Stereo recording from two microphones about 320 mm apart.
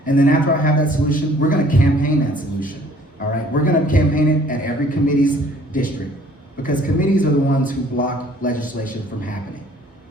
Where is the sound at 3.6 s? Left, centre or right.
Left.